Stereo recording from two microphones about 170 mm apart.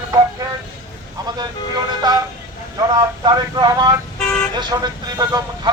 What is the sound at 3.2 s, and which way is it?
Speech, 25° right (ahead or behind).